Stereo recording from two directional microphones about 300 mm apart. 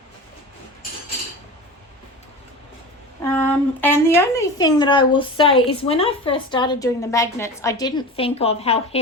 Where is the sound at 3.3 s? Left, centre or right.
Centre.